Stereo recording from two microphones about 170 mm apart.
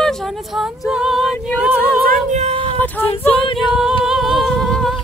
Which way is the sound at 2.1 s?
45° right (ahead or behind).